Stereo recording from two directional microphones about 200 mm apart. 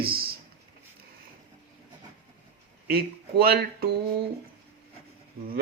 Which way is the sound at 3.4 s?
50° right (ahead or behind).